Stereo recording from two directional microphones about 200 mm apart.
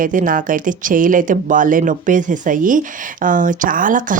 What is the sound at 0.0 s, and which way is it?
A woman's voice, 40° right (ahead or behind).